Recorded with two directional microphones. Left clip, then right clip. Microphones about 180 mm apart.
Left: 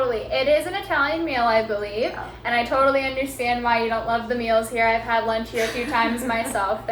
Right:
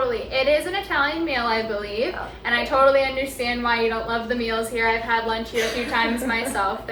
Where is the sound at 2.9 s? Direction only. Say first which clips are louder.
Right 2 dB; 25° left (ahead or behind).